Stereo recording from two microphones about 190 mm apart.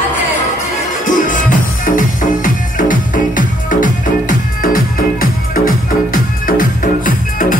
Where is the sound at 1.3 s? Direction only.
45° left (ahead or behind).